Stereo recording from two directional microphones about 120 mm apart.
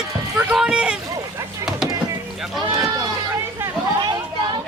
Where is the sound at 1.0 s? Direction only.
25° right (ahead or behind).